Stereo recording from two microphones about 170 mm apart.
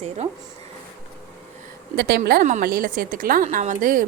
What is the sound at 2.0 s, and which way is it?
Speech, 70° right (ahead or behind).